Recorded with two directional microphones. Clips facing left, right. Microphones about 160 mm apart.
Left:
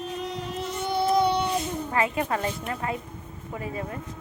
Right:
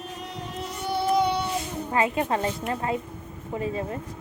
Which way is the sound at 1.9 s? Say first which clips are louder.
Right 3 dB; 25° right (ahead or behind).